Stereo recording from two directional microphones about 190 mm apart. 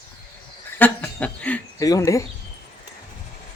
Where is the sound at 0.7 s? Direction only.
10° left (ahead or behind).